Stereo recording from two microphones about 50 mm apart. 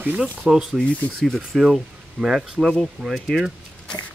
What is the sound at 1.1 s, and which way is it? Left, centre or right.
Speech, centre.